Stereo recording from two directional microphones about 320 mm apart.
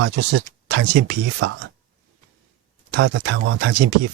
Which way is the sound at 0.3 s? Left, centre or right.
Right.